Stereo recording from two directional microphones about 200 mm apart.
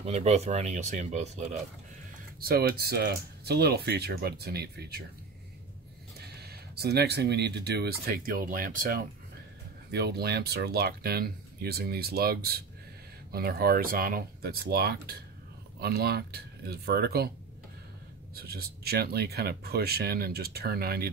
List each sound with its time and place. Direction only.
0.0 s speech: 30° right (ahead or behind)
2.4 s speech: 50° right (ahead or behind)
6.1 s speech: 55° right (ahead or behind)
9.8 s speech: 55° right (ahead or behind)
18.3 s speech: 50° right (ahead or behind)